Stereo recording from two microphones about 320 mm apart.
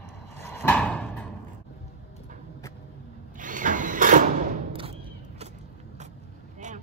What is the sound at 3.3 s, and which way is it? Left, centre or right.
Printer, right.